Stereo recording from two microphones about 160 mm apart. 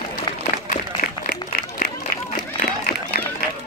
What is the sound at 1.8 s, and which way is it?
Run, 65° left (ahead or behind).